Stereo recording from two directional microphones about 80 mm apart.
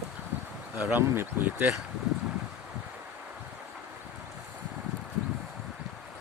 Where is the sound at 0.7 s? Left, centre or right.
Right.